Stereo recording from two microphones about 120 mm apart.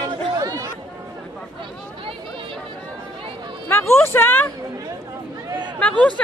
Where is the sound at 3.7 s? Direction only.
20° left (ahead or behind).